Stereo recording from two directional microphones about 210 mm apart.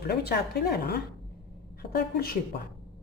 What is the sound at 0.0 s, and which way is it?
Speech, 50° left (ahead or behind).